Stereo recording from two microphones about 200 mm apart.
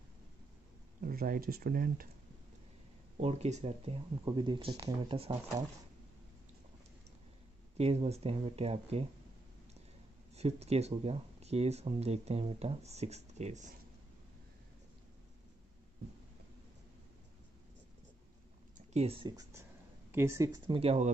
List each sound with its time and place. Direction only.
1.0 s speech: 45° right (ahead or behind)
3.2 s speech: 35° right (ahead or behind)
7.7 s speech: 30° right (ahead or behind)
10.3 s speech: 30° right (ahead or behind)
18.9 s speech: 30° right (ahead or behind)